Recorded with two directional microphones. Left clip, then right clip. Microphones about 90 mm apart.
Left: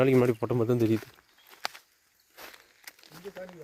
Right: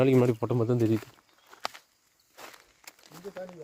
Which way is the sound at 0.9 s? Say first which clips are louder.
Even; 30° right (ahead or behind).